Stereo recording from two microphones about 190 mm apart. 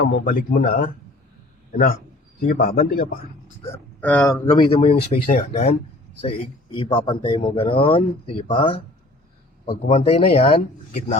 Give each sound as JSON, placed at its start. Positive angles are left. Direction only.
{"t": 0.0, "sound": "a man's voice", "side_deg": 50}
{"t": 4.0, "sound": "speech", "side_deg": 10}
{"t": 4.4, "sound": "speech", "side_deg": 25}